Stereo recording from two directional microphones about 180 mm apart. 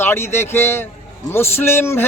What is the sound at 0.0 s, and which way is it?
A man's voice, 15° left (ahead or behind).